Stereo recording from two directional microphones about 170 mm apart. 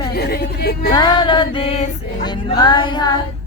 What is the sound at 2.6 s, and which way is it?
Music, 30° left (ahead or behind).